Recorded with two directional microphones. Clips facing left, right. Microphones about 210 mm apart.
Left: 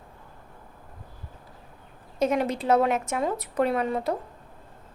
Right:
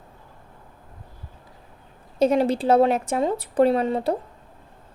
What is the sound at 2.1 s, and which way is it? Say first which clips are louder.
Speech: right 5 dB; 30° right (ahead or behind).